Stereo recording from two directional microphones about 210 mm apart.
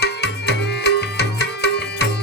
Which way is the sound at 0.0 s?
50° left (ahead or behind).